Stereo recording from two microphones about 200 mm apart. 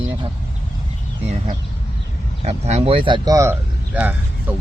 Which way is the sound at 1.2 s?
30° right (ahead or behind).